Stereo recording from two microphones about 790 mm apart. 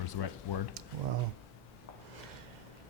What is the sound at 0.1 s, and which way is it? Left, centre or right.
Speech, left.